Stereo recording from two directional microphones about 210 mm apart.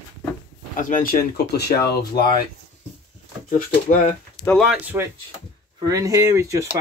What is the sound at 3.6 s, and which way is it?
Speech, 40° left (ahead or behind).